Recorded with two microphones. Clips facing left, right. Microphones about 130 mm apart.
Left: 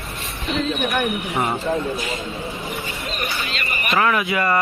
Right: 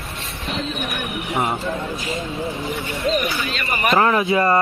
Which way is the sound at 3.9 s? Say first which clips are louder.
Right 2 dB; 30° right (ahead or behind).